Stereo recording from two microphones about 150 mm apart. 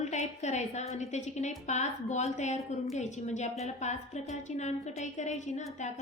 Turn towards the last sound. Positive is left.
turn(degrees=50)  # may be behind; listen again after turning